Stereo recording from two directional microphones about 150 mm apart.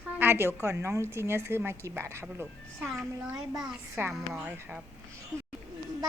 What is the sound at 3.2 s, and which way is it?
Female singing, 20° right (ahead or behind).